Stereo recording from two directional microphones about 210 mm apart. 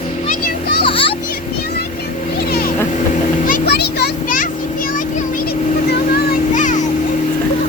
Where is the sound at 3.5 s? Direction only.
45° left (ahead or behind).